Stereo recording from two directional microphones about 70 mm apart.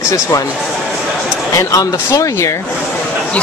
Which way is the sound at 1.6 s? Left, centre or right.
Left.